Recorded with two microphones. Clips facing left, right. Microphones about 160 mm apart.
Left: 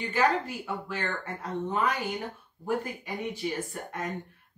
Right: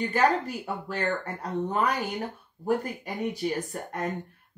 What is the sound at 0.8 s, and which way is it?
Speech, 40° right (ahead or behind).